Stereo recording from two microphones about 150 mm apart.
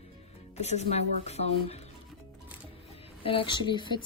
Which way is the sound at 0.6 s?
45° left (ahead or behind).